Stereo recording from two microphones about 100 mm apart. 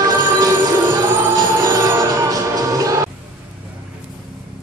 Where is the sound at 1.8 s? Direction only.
30° right (ahead or behind).